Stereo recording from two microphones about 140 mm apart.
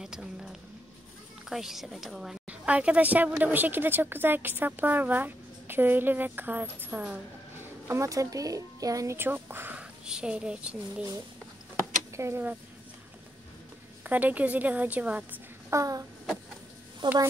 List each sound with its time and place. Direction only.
0.0 s a sound: 5° right (ahead or behind)
1.5 s a woman's voice: centre (ahead or behind)
7.9 s a woman's voice: 20° right (ahead or behind)
12.2 s a woman's voice: 15° right (ahead or behind)
14.0 s a woman's voice: 10° right (ahead or behind)
15.7 s a sound: 25° right (ahead or behind)
17.0 s a woman's voice: 35° right (ahead or behind)